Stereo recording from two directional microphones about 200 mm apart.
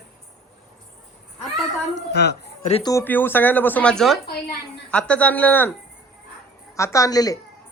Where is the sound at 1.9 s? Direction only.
55° left (ahead or behind).